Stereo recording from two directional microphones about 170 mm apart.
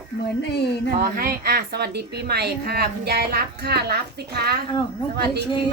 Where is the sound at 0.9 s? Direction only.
60° right (ahead or behind).